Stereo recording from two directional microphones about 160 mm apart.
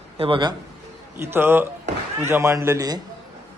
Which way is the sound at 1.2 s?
15° right (ahead or behind).